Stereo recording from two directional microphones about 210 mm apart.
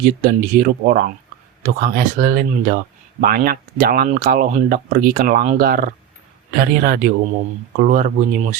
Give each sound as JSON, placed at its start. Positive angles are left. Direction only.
{"t": 0.0, "sound": "speech", "side_deg": -40}